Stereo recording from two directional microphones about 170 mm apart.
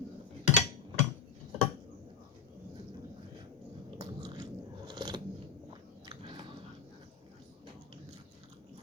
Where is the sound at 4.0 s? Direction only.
20° right (ahead or behind).